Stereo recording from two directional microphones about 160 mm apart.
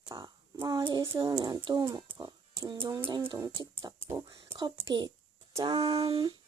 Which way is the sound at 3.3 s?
25° right (ahead or behind).